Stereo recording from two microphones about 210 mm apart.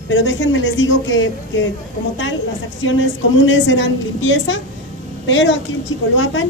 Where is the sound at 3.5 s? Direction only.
65° left (ahead or behind).